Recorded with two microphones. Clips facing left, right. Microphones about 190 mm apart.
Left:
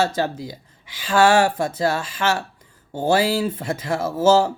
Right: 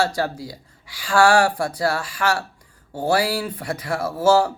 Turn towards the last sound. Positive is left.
turn(degrees=25)  # may be behind; listen again after turning